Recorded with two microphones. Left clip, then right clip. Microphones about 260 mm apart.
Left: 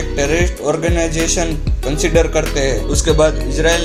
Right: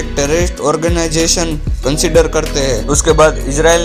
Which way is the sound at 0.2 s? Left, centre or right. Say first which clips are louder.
Right 3 dB; right.